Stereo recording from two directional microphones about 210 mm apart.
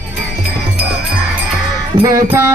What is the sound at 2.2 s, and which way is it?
Music, 10° right (ahead or behind).